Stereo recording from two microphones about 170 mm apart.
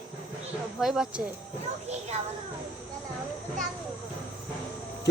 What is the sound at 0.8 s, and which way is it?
Speech, 5° right (ahead or behind).